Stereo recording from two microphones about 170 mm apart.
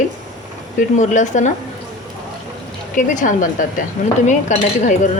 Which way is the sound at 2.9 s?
50° left (ahead or behind).